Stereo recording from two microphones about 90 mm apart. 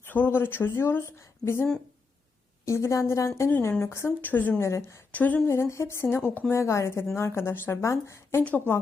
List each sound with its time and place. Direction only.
0.0 s speech: 20° left (ahead or behind)
2.6 s a woman's voice: 30° left (ahead or behind)
4.6 s a woman's voice: 30° left (ahead or behind)
5.1 s speech: 20° left (ahead or behind)
5.5 s a woman's voice: 30° left (ahead or behind)